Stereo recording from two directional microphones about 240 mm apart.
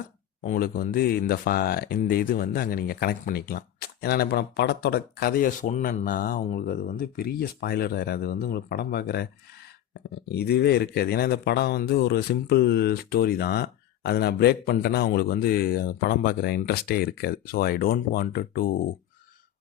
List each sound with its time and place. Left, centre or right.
0.4 s speech: left